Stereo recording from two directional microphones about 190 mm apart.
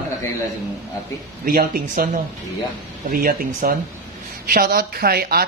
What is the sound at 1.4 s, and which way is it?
Speech, 50° right (ahead or behind).